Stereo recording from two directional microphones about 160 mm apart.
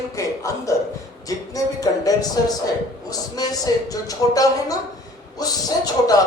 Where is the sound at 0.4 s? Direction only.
20° left (ahead or behind).